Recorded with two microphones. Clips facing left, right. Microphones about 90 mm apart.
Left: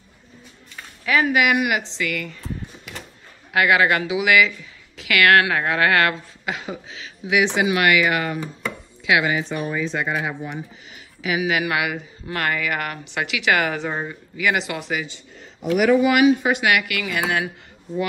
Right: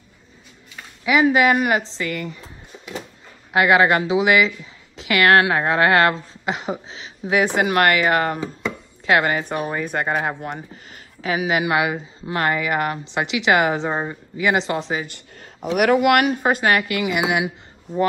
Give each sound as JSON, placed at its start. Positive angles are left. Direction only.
{"t": 1.0, "sound": "speech", "side_deg": -15}
{"t": 1.3, "sound": "speech", "side_deg": -35}
{"t": 2.1, "sound": "music", "side_deg": -25}
{"t": 3.5, "sound": "speech", "side_deg": -25}
{"t": 15.0, "sound": "speech", "side_deg": -60}